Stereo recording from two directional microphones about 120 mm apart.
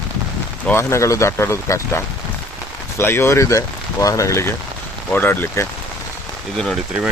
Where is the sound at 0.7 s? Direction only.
25° left (ahead or behind).